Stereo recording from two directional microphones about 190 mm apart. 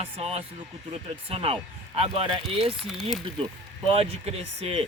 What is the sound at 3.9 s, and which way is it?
Speech, 30° right (ahead or behind).